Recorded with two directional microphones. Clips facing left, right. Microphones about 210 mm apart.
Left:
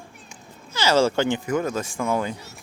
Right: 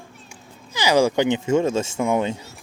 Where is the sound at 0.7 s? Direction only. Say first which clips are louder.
Right 2 dB; 15° right (ahead or behind).